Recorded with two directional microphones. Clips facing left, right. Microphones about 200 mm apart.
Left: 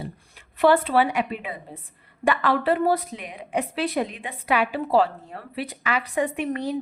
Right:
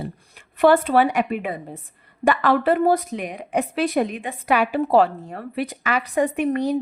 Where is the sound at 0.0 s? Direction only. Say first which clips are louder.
Right 4 dB; 50° right (ahead or behind).